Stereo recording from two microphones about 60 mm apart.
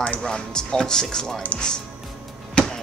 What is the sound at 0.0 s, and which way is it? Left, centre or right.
Speech, centre.